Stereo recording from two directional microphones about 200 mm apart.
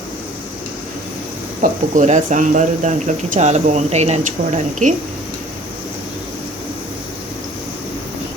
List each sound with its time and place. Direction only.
1.6 s speech: 35° right (ahead or behind)